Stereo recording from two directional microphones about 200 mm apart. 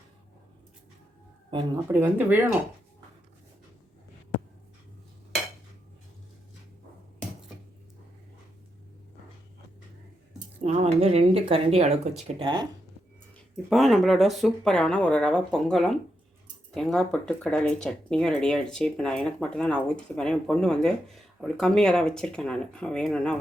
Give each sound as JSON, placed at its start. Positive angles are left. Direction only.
{"t": 1.5, "sound": "speech", "side_deg": -25}
{"t": 1.9, "sound": "speech", "side_deg": -10}
{"t": 10.6, "sound": "a sound", "side_deg": -30}
{"t": 12.4, "sound": "speech", "side_deg": -25}
{"t": 13.3, "sound": "speech", "side_deg": 0}